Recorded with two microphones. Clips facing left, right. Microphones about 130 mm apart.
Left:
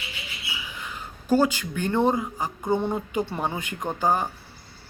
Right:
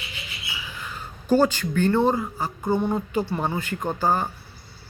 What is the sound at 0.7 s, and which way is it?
Speech, 15° left (ahead or behind).